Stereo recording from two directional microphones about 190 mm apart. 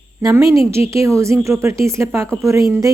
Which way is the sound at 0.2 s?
15° right (ahead or behind).